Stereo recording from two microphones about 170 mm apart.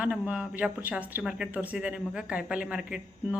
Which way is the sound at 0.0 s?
10° right (ahead or behind).